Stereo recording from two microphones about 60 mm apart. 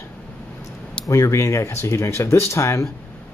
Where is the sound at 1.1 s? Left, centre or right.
Left.